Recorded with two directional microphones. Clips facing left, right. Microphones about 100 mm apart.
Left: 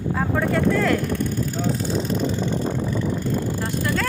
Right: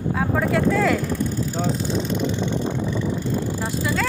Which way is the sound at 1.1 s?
55° left (ahead or behind).